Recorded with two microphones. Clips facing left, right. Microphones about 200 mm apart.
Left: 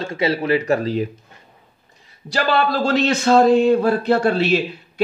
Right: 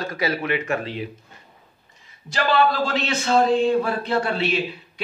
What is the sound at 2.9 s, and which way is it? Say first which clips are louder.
Speech: left 6 dB; 40° left (ahead or behind).